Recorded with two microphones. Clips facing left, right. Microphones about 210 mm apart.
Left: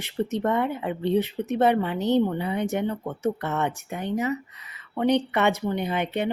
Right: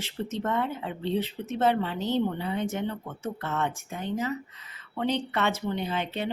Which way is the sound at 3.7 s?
65° left (ahead or behind).